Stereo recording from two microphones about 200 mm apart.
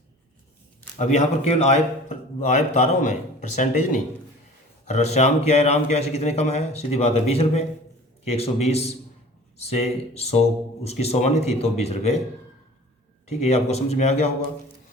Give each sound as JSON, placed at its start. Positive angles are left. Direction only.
{"t": 0.9, "sound": "a man's voice", "side_deg": 35}
{"t": 10.2, "sound": "a man's voice", "side_deg": 30}
{"t": 13.4, "sound": "a man's voice", "side_deg": 30}